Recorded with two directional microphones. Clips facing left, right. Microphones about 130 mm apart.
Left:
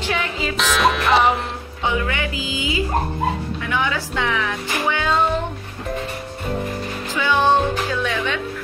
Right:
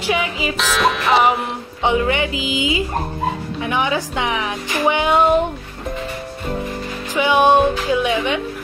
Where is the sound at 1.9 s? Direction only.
20° right (ahead or behind).